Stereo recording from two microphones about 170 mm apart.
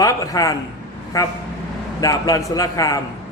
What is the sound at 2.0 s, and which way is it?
A man's voice, 20° left (ahead or behind).